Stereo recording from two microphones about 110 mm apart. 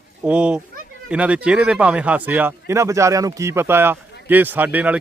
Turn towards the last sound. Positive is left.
turn(degrees=-15)  # may be behind; listen again after turning